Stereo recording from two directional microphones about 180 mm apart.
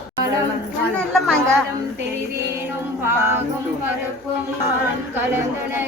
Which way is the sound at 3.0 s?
15° right (ahead or behind).